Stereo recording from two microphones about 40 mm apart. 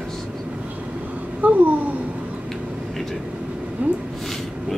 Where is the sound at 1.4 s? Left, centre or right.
Right.